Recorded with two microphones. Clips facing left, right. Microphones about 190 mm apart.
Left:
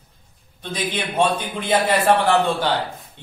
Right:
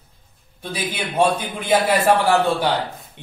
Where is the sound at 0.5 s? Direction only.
10° right (ahead or behind).